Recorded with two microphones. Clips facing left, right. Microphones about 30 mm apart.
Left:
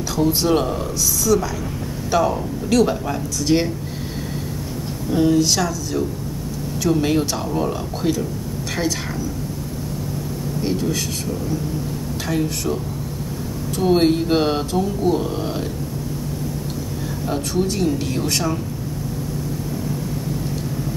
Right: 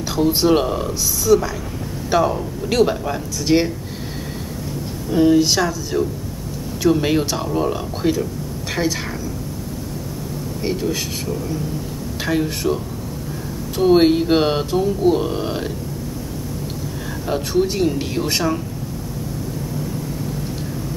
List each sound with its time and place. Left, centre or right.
0.1 s speech: centre
5.1 s speech: centre
10.6 s speech: centre
12.3 s speech: centre
13.7 s speech: centre
17.3 s speech: centre